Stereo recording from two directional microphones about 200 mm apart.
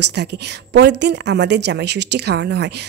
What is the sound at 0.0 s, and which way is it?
A woman's voice, 60° right (ahead or behind).